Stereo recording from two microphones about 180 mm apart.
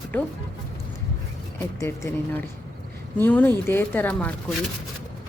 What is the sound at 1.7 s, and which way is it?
Speech, 15° left (ahead or behind).